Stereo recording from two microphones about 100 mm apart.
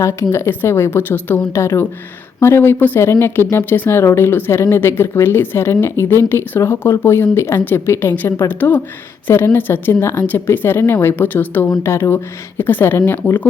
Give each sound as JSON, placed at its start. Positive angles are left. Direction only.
{"t": 0.0, "sound": "speech", "side_deg": 25}